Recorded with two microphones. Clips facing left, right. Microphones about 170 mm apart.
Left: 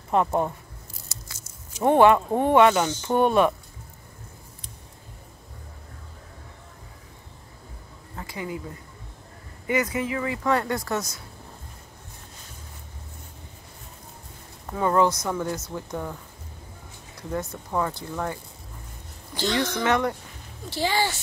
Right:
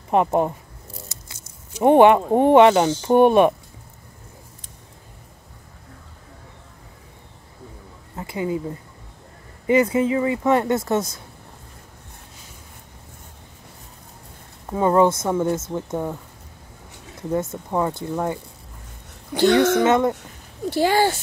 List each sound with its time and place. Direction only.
0.1 s speech: 20° right (ahead or behind)
1.0 s a sound: 20° right (ahead or behind)
3.1 s speech: 20° right (ahead or behind)
8.2 s speech: 25° right (ahead or behind)
9.7 s speech: 30° right (ahead or behind)
14.7 s speech: 20° right (ahead or behind)
17.3 s speech: 25° right (ahead or behind)
19.3 s speech: 60° right (ahead or behind)
19.8 s speech: 20° right (ahead or behind)
20.7 s speech: 50° right (ahead or behind)